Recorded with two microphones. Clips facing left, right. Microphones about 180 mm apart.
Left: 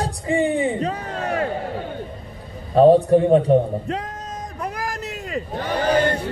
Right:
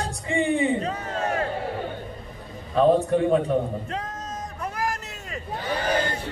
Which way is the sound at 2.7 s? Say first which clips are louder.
Left 6 dB; 35° left (ahead or behind).